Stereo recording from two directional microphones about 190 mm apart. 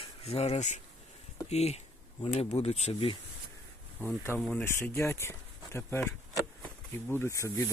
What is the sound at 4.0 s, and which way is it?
Speech, 10° left (ahead or behind).